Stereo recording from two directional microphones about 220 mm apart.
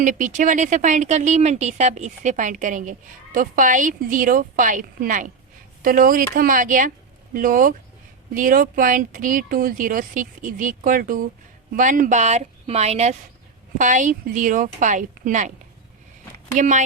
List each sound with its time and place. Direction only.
0.0 s speech: 35° right (ahead or behind)
16.6 s speech: 35° right (ahead or behind)